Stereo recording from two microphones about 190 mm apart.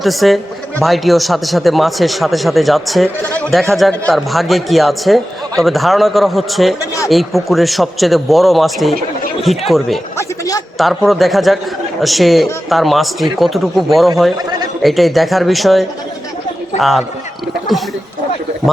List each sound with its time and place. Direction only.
0.0 s speech: centre (ahead or behind)
10.2 s a sound: 15° left (ahead or behind)
10.8 s a man's voice: centre (ahead or behind)
16.7 s speech: 35° left (ahead or behind)